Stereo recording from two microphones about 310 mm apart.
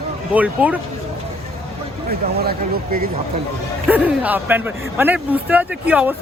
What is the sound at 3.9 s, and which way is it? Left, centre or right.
Speech, centre.